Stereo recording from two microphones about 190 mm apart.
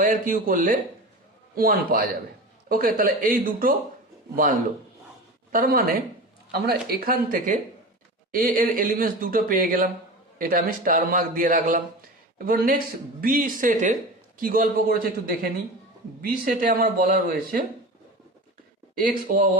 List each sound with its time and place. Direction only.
0.0 s speech: 45° right (ahead or behind)
5.5 s speech: 50° right (ahead or behind)
18.9 s speech: 45° right (ahead or behind)